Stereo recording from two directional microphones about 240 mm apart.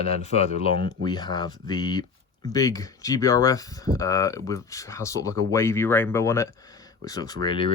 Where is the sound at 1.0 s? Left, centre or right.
Centre.